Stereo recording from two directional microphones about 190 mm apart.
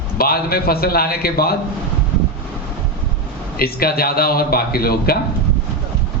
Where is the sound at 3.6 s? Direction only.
55° left (ahead or behind).